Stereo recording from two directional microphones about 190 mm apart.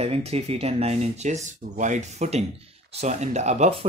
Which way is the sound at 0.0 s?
30° right (ahead or behind).